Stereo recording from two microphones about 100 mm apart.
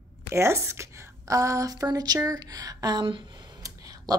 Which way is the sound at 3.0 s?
55° right (ahead or behind).